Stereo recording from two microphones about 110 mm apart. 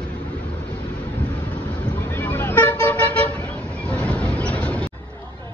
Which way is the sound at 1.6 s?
15° left (ahead or behind).